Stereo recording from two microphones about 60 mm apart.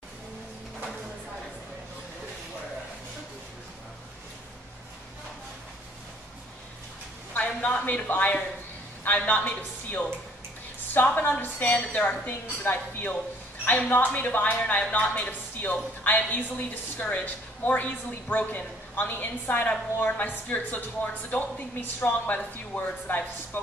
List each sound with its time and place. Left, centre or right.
7.3 s a woman's voice: left